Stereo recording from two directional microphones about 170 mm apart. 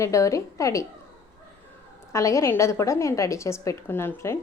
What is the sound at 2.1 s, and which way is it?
A woman's voice, 20° left (ahead or behind).